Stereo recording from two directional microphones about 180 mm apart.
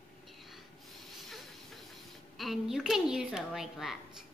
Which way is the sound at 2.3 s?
Centre (ahead or behind).